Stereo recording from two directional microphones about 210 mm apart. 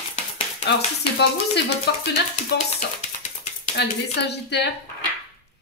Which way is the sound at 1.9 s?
50° left (ahead or behind).